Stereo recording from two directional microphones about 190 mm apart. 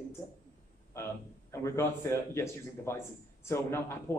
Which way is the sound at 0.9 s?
15° left (ahead or behind).